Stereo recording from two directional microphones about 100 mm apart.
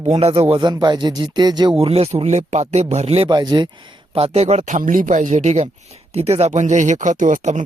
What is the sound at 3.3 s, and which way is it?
Speech, 45° right (ahead or behind).